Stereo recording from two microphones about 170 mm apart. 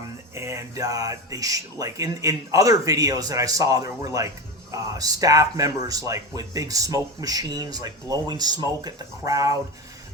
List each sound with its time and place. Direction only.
0.3 s speech: 15° right (ahead or behind)